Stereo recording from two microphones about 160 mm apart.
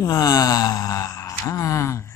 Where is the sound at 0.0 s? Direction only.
20° left (ahead or behind).